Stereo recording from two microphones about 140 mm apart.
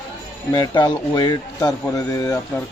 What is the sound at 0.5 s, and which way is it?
Speech, 30° left (ahead or behind).